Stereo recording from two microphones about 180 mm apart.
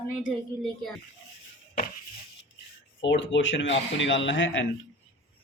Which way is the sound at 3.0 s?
90° left.